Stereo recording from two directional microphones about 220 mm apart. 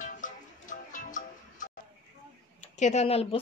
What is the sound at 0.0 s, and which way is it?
Music, 35° left (ahead or behind).